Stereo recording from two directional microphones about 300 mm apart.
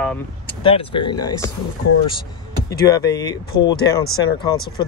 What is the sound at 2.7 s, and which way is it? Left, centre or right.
Speech, centre.